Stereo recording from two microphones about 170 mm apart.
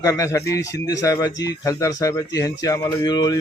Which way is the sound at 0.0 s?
20° left (ahead or behind).